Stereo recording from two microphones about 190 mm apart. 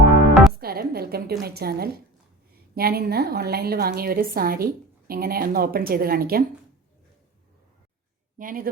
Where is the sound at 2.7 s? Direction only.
55° right (ahead or behind).